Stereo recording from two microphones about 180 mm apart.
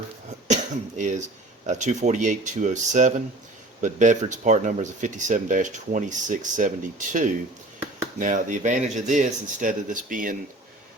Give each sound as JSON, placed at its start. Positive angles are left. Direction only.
{"t": 0.4, "sound": "cough", "side_deg": -40}
{"t": 1.6, "sound": "speech", "side_deg": -40}